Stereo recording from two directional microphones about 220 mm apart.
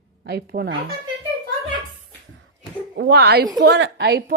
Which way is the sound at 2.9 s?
50° right (ahead or behind).